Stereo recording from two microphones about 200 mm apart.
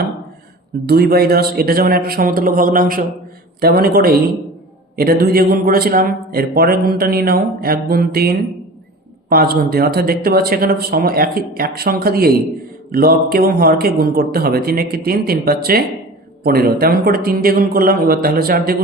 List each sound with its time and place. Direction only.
0.9 s a man's voice: 50° right (ahead or behind)